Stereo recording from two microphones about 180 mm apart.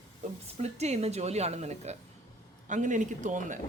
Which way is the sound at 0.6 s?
40° right (ahead or behind).